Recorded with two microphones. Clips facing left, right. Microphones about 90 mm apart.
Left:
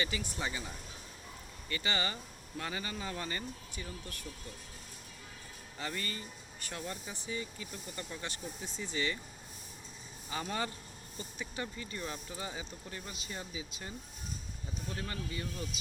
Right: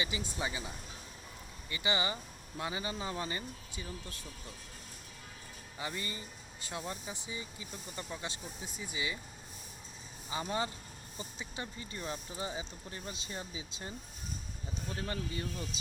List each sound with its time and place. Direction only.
0.0 s speech: 20° right (ahead or behind)
1.7 s speech: 15° right (ahead or behind)
5.8 s speech: 15° right (ahead or behind)
10.2 s speech: 20° right (ahead or behind)
14.9 s speech: 30° right (ahead or behind)